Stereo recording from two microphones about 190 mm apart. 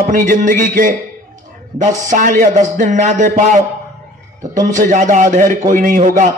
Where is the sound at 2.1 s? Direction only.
45° right (ahead or behind).